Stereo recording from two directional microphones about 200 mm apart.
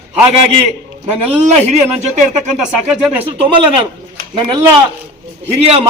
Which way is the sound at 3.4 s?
25° right (ahead or behind).